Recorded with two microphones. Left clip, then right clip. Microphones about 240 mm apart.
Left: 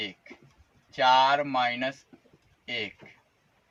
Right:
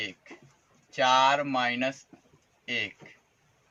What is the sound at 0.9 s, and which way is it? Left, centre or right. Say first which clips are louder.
Speech: left 1 dB; centre.